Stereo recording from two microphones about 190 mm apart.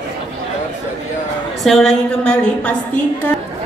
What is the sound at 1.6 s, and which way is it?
A woman's voice, centre (ahead or behind).